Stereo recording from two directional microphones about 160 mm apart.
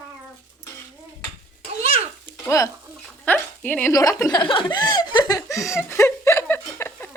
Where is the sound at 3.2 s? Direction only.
10° left (ahead or behind).